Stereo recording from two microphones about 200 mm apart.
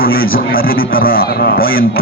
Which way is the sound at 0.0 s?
45° left (ahead or behind).